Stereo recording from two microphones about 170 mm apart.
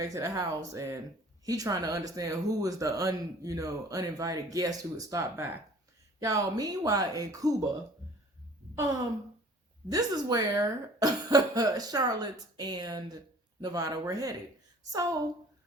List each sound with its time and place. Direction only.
0.0 s speech: 20° right (ahead or behind)
9.9 s speech: 20° right (ahead or behind)